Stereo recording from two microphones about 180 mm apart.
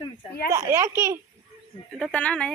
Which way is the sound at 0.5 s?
15° right (ahead or behind).